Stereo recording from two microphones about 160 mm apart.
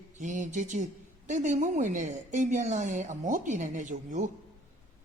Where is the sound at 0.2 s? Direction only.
50° right (ahead or behind).